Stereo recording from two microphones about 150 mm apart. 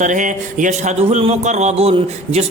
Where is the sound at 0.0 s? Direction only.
55° right (ahead or behind).